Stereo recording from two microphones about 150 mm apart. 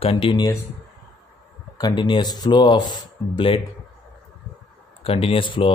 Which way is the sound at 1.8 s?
30° left (ahead or behind).